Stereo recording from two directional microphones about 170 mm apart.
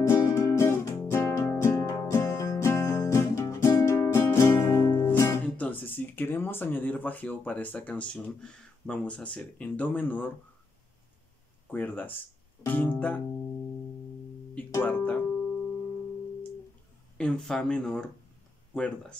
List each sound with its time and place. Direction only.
0.0 s music: 15° left (ahead or behind)
5.0 s speech: 15° left (ahead or behind)
11.7 s speech: 10° left (ahead or behind)
14.5 s speech: 10° left (ahead or behind)
17.2 s speech: 5° left (ahead or behind)